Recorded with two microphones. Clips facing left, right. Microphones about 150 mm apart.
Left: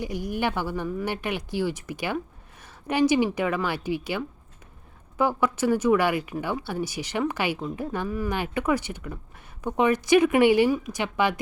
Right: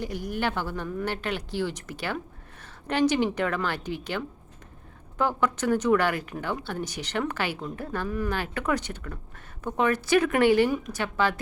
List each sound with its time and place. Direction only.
0.3 s speech: 10° left (ahead or behind)